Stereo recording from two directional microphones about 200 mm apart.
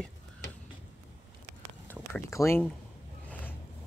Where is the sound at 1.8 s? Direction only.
10° left (ahead or behind).